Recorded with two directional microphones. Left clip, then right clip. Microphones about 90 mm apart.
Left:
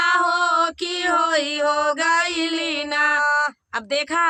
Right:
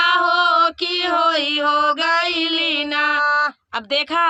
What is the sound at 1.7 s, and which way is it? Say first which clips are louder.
Speech: right 4 dB; 10° right (ahead or behind).